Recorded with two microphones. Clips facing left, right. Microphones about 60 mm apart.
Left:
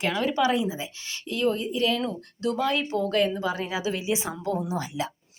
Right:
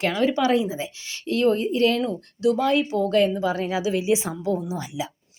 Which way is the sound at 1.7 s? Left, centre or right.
Right.